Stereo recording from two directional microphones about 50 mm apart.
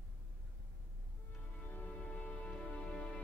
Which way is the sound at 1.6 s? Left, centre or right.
Left.